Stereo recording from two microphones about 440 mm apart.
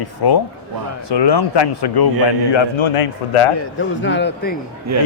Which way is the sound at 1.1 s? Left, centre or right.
Left.